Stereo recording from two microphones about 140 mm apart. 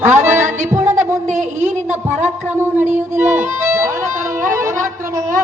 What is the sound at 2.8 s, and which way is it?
Speech, 60° right (ahead or behind).